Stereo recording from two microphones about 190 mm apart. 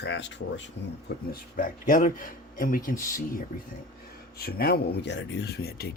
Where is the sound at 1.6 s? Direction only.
45° left (ahead or behind).